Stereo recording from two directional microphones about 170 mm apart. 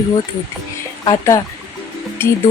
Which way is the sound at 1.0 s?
20° left (ahead or behind).